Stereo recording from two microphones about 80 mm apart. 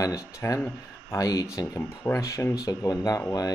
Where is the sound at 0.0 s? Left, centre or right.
Left.